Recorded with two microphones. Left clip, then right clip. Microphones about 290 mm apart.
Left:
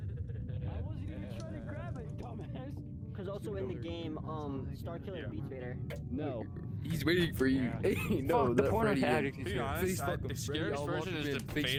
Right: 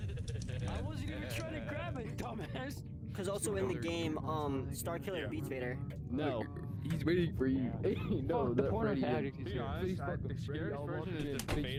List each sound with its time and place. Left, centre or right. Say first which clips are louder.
3.2 s speech: right 3 dB; right
6.1 s speech: right 3 dB; centre
6.9 s speech: left 3 dB; centre
7.3 s speech: left 4 dB; left
11.0 s speech: left 4 dB; left